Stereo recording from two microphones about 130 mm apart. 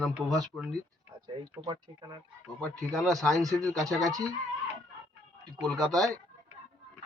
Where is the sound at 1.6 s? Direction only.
30° right (ahead or behind).